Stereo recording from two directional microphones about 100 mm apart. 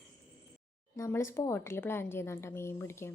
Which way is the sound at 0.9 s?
30° left (ahead or behind).